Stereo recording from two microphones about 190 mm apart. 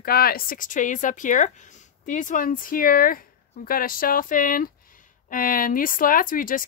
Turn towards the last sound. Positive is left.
turn(degrees=45)  # may be behind; listen again after turning